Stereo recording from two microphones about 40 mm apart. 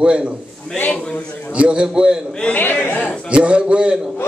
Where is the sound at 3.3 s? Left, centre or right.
Right.